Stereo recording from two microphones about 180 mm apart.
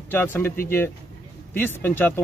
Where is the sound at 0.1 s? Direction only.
10° left (ahead or behind).